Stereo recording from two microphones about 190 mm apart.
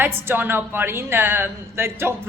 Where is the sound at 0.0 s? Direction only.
10° right (ahead or behind).